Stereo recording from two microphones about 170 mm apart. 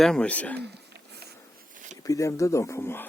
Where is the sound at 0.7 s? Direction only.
75° right (ahead or behind).